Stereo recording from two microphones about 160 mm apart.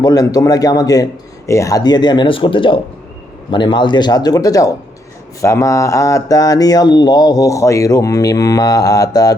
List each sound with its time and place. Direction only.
0.0 s speech: 25° left (ahead or behind)